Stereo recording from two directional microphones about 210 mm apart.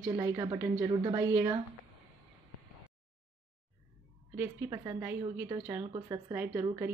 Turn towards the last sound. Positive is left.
turn(degrees=-10)  # may be behind; listen again after turning